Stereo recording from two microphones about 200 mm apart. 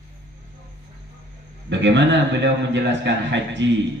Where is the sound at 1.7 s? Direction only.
60° right (ahead or behind).